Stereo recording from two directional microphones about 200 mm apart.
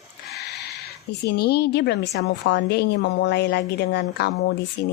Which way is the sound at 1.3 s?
55° left (ahead or behind).